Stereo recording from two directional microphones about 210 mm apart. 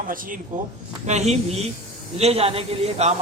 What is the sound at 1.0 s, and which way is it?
A man's voice, 30° right (ahead or behind).